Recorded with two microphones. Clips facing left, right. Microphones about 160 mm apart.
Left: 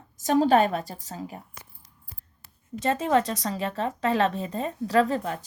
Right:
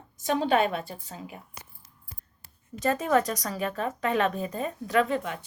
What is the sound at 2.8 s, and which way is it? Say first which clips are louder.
Speech: left 1 dB; 25° left (ahead or behind).